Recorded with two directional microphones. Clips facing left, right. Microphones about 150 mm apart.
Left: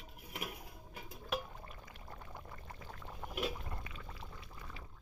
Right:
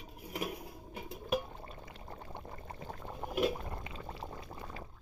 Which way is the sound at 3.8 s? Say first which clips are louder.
Right 7 dB; 30° right (ahead or behind).